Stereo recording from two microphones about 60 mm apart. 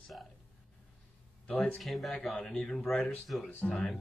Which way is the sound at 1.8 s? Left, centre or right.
Centre.